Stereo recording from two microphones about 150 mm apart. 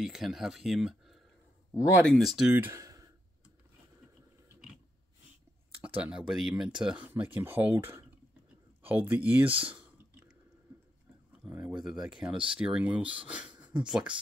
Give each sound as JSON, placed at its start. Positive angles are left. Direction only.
{"t": 0.0, "sound": "speech", "side_deg": -5}
{"t": 5.9, "sound": "speech", "side_deg": -10}
{"t": 9.5, "sound": "speech", "side_deg": -35}
{"t": 11.4, "sound": "speech", "side_deg": -5}